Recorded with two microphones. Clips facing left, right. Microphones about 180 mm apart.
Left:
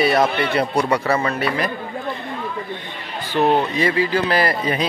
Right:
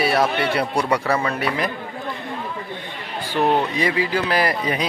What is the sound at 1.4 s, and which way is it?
Speech, 15° right (ahead or behind).